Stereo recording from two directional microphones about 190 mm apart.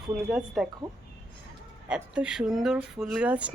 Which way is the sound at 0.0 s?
5° right (ahead or behind).